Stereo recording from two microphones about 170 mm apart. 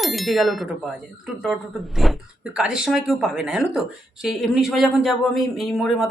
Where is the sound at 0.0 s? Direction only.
Centre (ahead or behind).